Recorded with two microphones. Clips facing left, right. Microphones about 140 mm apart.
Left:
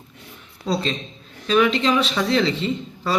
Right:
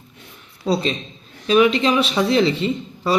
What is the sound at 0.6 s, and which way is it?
Speech, 15° right (ahead or behind).